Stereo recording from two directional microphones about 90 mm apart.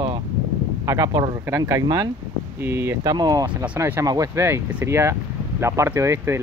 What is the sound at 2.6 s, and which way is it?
Speech, 30° right (ahead or behind).